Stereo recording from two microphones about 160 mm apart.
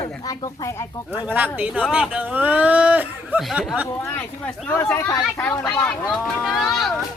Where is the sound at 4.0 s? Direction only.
10° left (ahead or behind).